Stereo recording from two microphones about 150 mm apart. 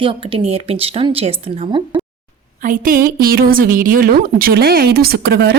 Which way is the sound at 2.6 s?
65° right (ahead or behind).